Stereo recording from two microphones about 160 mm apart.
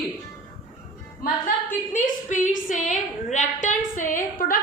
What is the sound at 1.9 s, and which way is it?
A woman's voice, 50° left (ahead or behind).